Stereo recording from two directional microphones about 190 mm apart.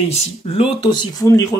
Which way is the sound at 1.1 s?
15° left (ahead or behind).